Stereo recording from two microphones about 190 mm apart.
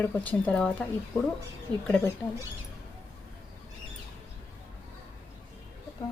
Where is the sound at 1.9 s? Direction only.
10° left (ahead or behind).